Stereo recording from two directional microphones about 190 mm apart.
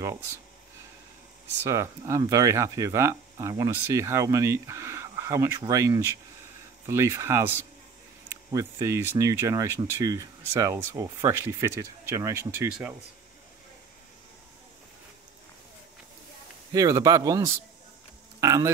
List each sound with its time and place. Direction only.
1.6 s speech: 15° right (ahead or behind)
16.7 s speech: 20° right (ahead or behind)